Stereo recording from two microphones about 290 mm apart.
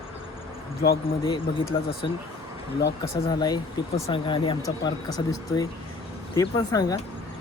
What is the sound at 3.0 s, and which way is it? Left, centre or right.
Speech, centre.